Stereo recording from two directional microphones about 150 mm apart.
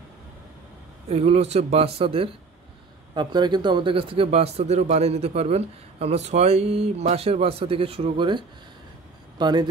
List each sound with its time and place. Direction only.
1.0 s speech: 45° right (ahead or behind)
3.2 s a man's voice: 30° right (ahead or behind)